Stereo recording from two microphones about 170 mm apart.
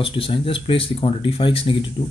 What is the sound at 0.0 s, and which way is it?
Speech, 30° left (ahead or behind).